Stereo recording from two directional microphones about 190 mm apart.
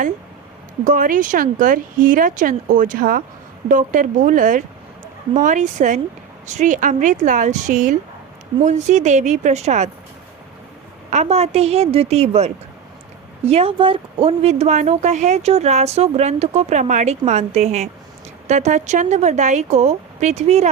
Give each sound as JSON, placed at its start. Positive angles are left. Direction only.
{"t": 0.9, "sound": "speech", "side_deg": -45}
{"t": 11.1, "sound": "speech", "side_deg": -35}